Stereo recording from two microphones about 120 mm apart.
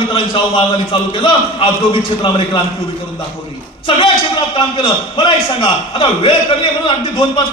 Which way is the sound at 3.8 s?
45° left (ahead or behind).